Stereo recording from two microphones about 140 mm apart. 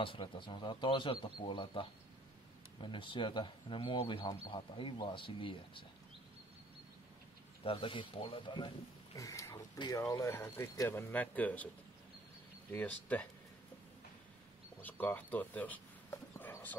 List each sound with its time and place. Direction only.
0.0 s speech: 35° left (ahead or behind)
7.6 s speech: 40° left (ahead or behind); by 11.7 s 10° left (ahead or behind)
12.7 s speech: 10° left (ahead or behind)
14.8 s speech: 10° left (ahead or behind)